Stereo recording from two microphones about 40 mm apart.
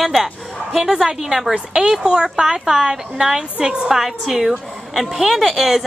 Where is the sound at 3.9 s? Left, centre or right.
Centre.